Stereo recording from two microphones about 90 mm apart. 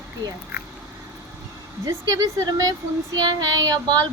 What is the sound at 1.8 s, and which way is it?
A woman's voice, 40° right (ahead or behind).